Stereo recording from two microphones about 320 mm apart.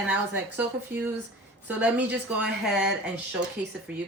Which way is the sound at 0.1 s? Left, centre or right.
Centre.